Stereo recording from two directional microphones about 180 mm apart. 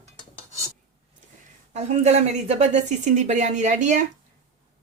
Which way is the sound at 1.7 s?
40° right (ahead or behind).